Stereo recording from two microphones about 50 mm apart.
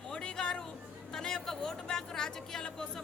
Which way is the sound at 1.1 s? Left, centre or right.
Centre.